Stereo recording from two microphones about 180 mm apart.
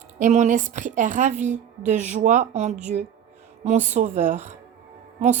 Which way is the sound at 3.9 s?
40° right (ahead or behind).